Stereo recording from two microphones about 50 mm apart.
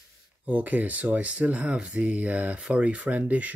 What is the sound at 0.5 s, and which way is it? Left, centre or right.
Speech, right.